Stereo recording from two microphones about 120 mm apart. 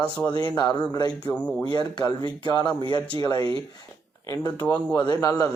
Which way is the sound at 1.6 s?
40° left (ahead or behind).